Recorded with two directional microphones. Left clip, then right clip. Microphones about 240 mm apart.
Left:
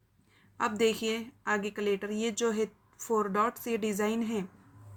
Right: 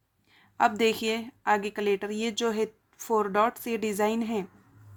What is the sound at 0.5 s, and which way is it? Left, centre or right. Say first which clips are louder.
A woman's voice: right 5 dB; right.